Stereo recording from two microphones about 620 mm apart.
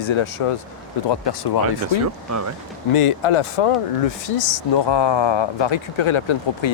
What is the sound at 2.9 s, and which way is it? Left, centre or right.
Speech, left.